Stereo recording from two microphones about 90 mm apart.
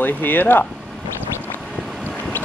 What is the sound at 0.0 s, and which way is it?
Speech, 20° left (ahead or behind).